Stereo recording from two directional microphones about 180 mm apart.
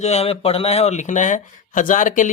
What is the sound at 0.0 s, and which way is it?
Speech, 35° left (ahead or behind).